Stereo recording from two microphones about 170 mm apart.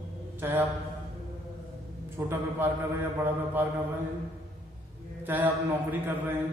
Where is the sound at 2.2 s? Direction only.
15° right (ahead or behind).